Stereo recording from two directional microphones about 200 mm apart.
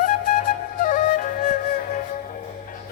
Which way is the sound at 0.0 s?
40° left (ahead or behind).